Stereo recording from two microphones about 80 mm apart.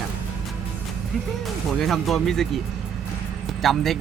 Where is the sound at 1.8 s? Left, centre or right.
Centre.